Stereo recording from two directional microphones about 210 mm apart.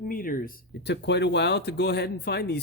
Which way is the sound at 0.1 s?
40° left (ahead or behind).